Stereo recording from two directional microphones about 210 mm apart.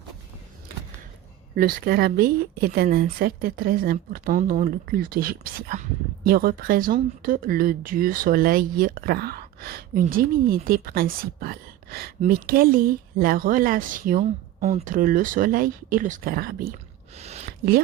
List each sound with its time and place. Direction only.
1.5 s speech: 45° right (ahead or behind)
17.2 s speech: 30° right (ahead or behind)